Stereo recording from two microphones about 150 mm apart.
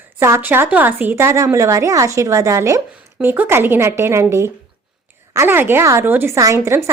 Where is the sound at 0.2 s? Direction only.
15° right (ahead or behind).